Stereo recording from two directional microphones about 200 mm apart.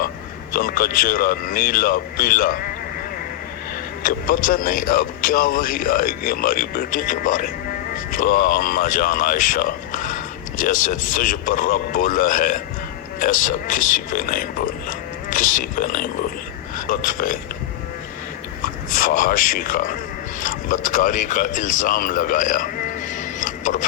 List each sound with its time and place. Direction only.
0.5 s a man's voice: 45° left (ahead or behind)
4.0 s a man's voice: 45° left (ahead or behind)
18.6 s speech: 45° left (ahead or behind)